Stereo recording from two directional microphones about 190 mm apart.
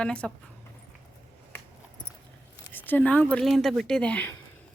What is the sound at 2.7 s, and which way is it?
Speech, 10° left (ahead or behind).